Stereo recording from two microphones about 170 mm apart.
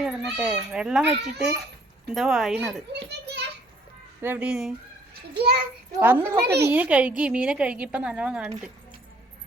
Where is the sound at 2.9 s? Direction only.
80° right.